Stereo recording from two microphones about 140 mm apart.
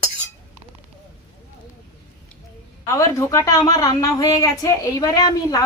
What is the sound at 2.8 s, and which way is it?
A woman's voice, 20° left (ahead or behind).